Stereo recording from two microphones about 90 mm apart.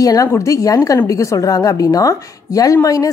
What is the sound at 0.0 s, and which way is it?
A woman's voice, 40° left (ahead or behind).